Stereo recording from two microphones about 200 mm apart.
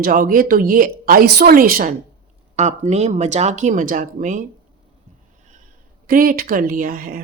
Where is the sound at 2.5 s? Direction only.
35° right (ahead or behind).